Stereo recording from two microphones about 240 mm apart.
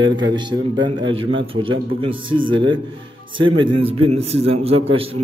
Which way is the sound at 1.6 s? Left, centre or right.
Right.